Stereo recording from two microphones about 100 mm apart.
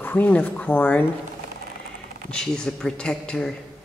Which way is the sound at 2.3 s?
5° left (ahead or behind).